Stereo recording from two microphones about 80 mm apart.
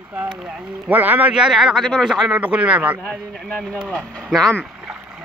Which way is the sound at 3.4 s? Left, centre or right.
Centre.